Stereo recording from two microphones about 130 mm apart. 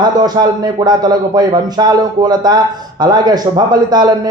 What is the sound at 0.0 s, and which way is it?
A man's voice, 35° right (ahead or behind).